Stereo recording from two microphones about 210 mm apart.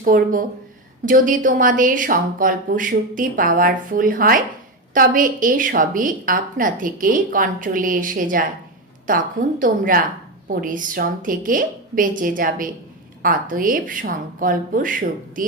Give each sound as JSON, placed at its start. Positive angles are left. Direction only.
{"t": 0.0, "sound": "a woman's voice", "side_deg": -40}